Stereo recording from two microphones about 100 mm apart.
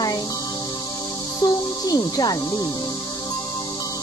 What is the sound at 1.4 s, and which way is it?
Speech, 40° left (ahead or behind).